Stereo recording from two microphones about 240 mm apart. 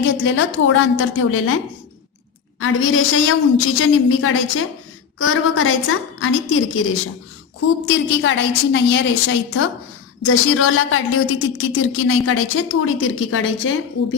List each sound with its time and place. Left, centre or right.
0.0 s a woman's voice: left
2.6 s a woman's voice: left
7.9 s a woman's voice: left
10.2 s a woman's voice: left